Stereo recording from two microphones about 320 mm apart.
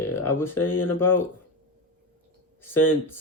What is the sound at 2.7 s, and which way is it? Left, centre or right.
Speech, centre.